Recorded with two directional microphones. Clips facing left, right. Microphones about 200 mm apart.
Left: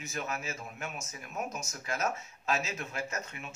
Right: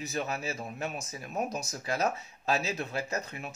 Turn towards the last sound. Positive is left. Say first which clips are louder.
# right 3 dB
turn(degrees=-35)  # may be behind; listen again after turning